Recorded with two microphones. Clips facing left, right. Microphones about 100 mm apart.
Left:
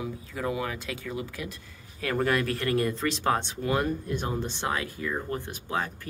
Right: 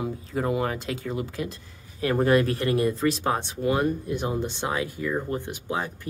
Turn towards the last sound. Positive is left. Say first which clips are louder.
# right 2 dB
turn(degrees=-20)  # may be behind; listen again after turning